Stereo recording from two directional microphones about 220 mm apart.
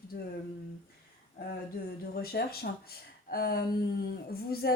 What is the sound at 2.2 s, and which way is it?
Speech, 45° left (ahead or behind).